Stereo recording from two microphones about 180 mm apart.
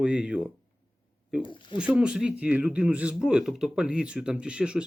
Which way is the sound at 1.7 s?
5° right (ahead or behind).